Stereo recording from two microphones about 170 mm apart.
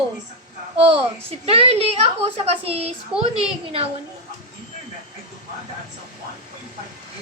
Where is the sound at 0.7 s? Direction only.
35° right (ahead or behind).